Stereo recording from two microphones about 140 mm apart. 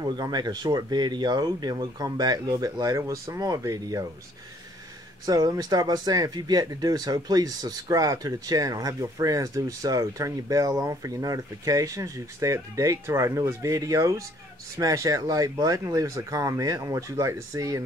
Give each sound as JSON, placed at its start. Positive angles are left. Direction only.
{"t": 0.0, "sound": "speech", "side_deg": -30}
{"t": 5.2, "sound": "speech", "side_deg": -25}